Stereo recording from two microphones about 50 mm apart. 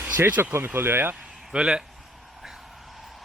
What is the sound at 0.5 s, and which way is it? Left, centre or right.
Speech, right.